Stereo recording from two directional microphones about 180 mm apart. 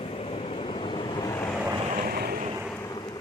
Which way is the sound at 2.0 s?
60° right (ahead or behind).